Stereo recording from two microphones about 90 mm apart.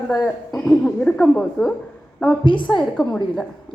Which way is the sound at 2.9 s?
5° left (ahead or behind).